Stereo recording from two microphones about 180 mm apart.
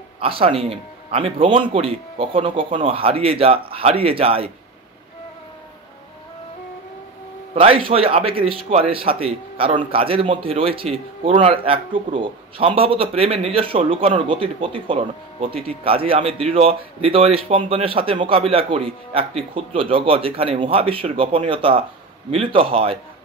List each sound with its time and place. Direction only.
0.2 s a man's voice: 30° right (ahead or behind)
7.5 s a man's voice: 30° right (ahead or behind)